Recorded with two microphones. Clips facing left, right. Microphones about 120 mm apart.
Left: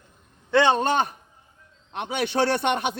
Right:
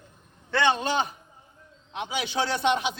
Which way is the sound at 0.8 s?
55° left (ahead or behind).